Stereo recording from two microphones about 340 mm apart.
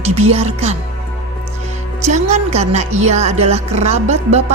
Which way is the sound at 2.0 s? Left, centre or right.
Centre.